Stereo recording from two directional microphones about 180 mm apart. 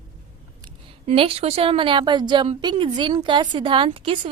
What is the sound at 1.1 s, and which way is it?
A woman's voice, 30° right (ahead or behind).